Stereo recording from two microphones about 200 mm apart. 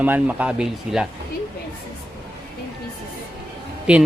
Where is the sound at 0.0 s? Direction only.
5° right (ahead or behind).